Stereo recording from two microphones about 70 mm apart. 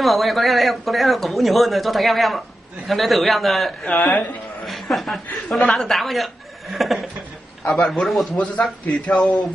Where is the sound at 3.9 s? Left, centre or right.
Left.